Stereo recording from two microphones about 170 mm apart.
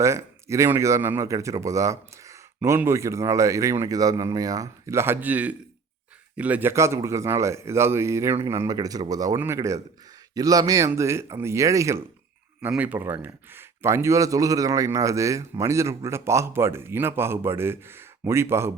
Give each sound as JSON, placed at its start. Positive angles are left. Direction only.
{"t": 0.0, "sound": "speech", "side_deg": -15}